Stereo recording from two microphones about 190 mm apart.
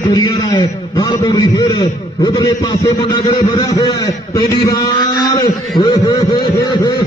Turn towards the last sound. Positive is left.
turn(degrees=20)  # may be behind; listen again after turning